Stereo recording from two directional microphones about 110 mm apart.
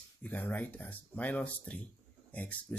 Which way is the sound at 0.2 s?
15° left (ahead or behind).